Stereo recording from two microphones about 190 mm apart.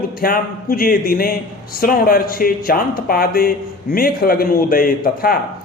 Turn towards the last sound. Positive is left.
turn(degrees=50)  # may be behind; listen again after turning